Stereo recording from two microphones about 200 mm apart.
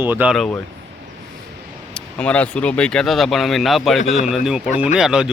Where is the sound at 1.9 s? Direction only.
5° left (ahead or behind).